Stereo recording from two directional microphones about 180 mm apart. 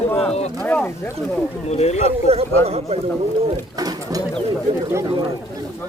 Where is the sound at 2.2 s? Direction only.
35° right (ahead or behind).